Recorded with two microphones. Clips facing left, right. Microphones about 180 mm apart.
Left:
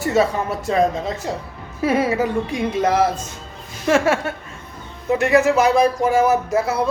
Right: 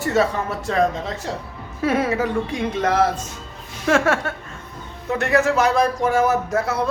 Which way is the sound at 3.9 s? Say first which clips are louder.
Left 1 dB; 5° left (ahead or behind).